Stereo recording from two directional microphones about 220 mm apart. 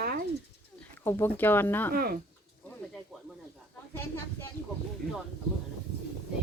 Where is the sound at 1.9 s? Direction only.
40° right (ahead or behind).